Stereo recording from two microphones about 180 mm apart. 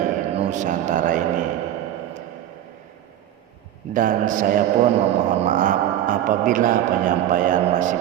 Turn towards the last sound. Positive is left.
turn(degrees=-45)  # may be behind; listen again after turning